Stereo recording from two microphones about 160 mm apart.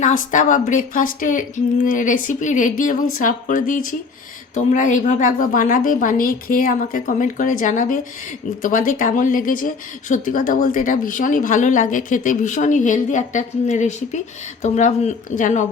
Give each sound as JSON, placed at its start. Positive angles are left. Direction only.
{"t": 0.0, "sound": "a woman's voice", "side_deg": 50}